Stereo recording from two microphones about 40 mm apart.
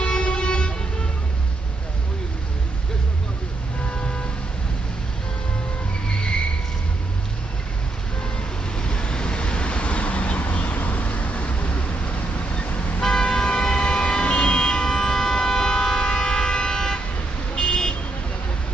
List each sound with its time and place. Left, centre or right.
0.0 s vehicle: left
6.0 s vehicle: left
8.7 s vehicle: left
13.0 s vehicle: centre
17.6 s car alarm: centre